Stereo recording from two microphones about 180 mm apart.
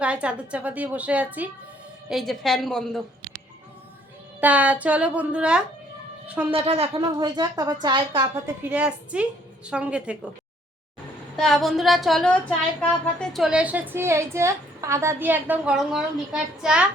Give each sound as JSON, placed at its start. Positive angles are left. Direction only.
{"t": 0.0, "sound": "a woman's voice", "side_deg": -5}
{"t": 2.0, "sound": "a sound", "side_deg": 0}
{"t": 4.4, "sound": "a woman's voice", "side_deg": -10}
{"t": 6.5, "sound": "a woman's voice", "side_deg": -35}
{"t": 6.9, "sound": "a woman's voice", "side_deg": -25}
{"t": 8.7, "sound": "a woman's voice", "side_deg": -10}
{"t": 9.6, "sound": "a sound", "side_deg": -5}
{"t": 11.3, "sound": "a sound", "side_deg": 0}
{"t": 13.1, "sound": "a woman's voice", "side_deg": 0}